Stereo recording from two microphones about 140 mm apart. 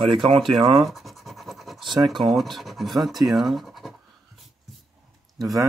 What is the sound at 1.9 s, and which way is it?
Speech, 25° right (ahead or behind).